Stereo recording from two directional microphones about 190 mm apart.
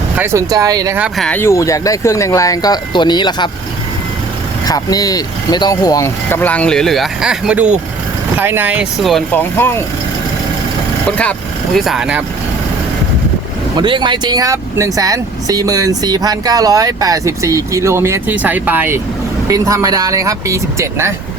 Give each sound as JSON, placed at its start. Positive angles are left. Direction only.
{"t": 0.2, "sound": "speech", "side_deg": -15}
{"t": 0.9, "sound": "speech", "side_deg": -5}
{"t": 4.6, "sound": "speech", "side_deg": 20}
{"t": 11.2, "sound": "speech", "side_deg": 5}
{"t": 13.7, "sound": "speech", "side_deg": -25}